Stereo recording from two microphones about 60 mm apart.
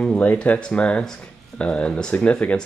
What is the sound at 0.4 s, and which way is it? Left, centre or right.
Speech, centre.